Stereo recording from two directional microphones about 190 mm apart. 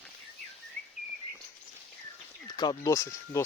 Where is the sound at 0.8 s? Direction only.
5° left (ahead or behind).